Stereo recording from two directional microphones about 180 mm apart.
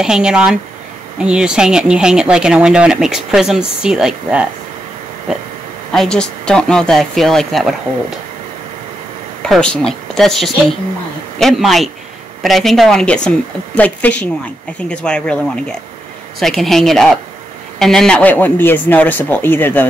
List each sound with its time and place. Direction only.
0.0 s speech: 5° right (ahead or behind)
9.4 s a man's voice: 5° left (ahead or behind)